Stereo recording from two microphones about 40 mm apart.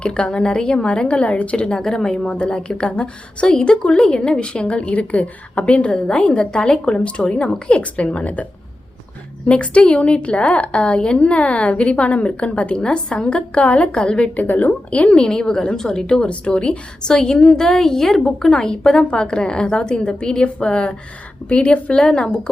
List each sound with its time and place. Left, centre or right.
0.0 s a woman's voice: left
4.8 s a woman's voice: left
9.5 s a woman's voice: left
14.4 s a woman's voice: left